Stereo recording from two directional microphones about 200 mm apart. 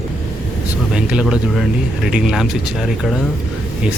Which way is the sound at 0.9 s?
5° right (ahead or behind).